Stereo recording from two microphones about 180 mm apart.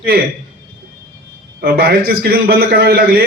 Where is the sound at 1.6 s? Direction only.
60° right (ahead or behind).